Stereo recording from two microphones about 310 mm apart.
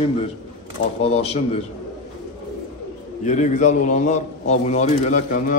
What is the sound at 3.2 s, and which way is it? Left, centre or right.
A man's voice, left.